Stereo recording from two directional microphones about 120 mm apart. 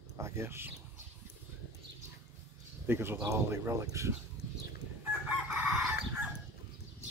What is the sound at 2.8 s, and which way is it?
Speech, 20° right (ahead or behind).